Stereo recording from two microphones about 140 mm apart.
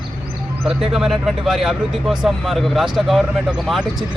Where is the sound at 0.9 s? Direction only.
Centre (ahead or behind).